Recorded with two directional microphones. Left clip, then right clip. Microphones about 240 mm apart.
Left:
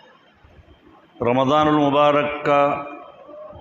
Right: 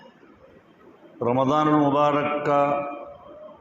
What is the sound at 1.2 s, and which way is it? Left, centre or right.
A man's voice, left.